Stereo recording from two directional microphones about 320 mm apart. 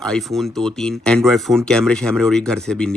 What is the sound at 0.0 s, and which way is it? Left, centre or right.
Speech, centre.